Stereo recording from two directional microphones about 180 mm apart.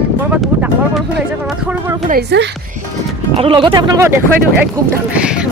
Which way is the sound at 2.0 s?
65° right (ahead or behind).